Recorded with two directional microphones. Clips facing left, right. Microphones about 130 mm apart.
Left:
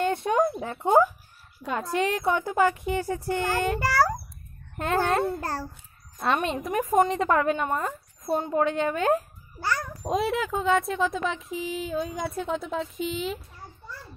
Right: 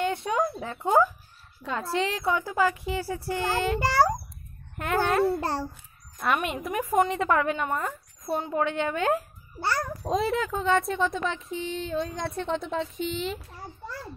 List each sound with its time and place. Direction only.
0.0 s a sound: 55° left (ahead or behind)
0.4 s a woman's voice: 20° left (ahead or behind)
3.3 s a child's voice: 15° right (ahead or behind)
4.7 s speech: 25° left (ahead or behind)
5.2 s a child's voice: 30° right (ahead or behind)
6.2 s speech: 25° left (ahead or behind)
8.5 s a woman's voice: 35° left (ahead or behind)
9.6 s a child's voice: 30° right (ahead or behind)
10.0 s speech: 5° left (ahead or behind)